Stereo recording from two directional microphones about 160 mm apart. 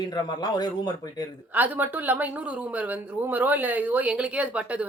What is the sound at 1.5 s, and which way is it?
Speech, 10° right (ahead or behind).